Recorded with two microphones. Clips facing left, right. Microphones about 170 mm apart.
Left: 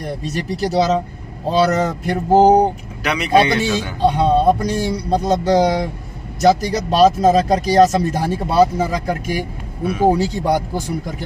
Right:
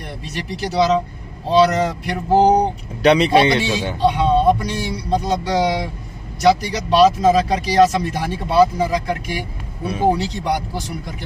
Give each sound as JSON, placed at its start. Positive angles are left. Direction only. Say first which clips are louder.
{"t": 0.0, "sound": "speech", "louder": "left 6 dB", "side_deg": 40}
{"t": 3.0, "sound": "a man's voice", "louder": "right 3 dB", "side_deg": -30}
{"t": 4.0, "sound": "speech", "louder": "left 1 dB", "side_deg": 40}